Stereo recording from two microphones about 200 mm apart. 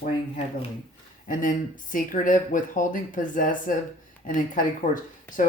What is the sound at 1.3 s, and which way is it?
Speech, 40° left (ahead or behind).